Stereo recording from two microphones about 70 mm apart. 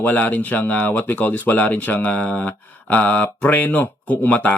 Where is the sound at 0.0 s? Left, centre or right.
Left.